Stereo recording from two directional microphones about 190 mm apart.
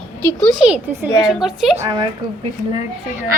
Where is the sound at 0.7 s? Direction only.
5° right (ahead or behind).